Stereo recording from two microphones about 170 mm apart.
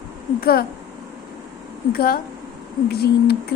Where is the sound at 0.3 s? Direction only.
65° left (ahead or behind).